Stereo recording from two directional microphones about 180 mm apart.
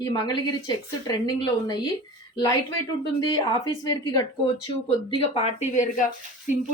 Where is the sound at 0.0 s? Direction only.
20° left (ahead or behind).